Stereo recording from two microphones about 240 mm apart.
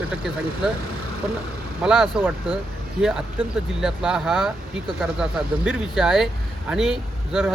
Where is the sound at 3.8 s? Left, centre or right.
Centre.